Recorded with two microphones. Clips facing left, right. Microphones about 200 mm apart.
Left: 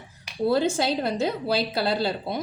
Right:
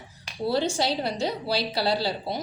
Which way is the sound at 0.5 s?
50° left (ahead or behind).